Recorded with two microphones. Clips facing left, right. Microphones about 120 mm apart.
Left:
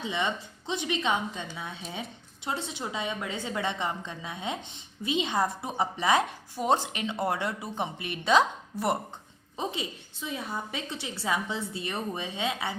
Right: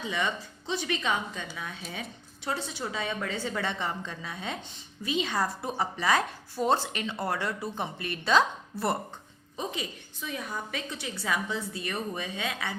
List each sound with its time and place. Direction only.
0.0 s speech: 25° left (ahead or behind)